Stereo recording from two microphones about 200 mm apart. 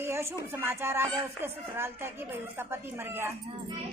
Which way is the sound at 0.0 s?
15° right (ahead or behind).